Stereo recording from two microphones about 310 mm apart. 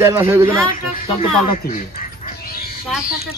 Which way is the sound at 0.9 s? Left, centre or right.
Left.